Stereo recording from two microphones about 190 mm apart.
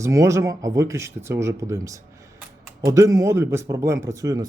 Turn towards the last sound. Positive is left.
turn(degrees=-20)  # may be behind; listen again after turning